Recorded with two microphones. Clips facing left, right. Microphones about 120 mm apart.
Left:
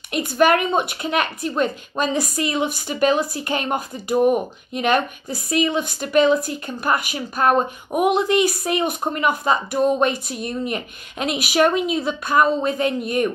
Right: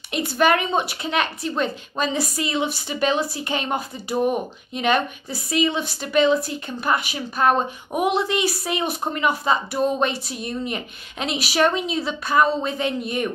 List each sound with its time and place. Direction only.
0.1 s a woman's voice: 45° left (ahead or behind)